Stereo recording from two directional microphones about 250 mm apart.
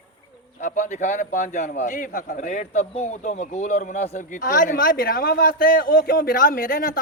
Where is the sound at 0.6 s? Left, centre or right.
Left.